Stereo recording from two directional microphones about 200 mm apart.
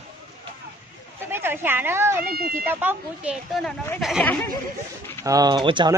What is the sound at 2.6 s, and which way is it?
Speech, 10° right (ahead or behind).